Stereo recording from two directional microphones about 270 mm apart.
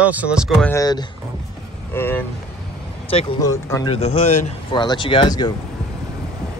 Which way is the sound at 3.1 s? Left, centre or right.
Centre.